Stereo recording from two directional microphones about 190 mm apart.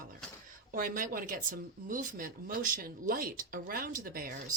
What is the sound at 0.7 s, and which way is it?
Speech, 45° right (ahead or behind).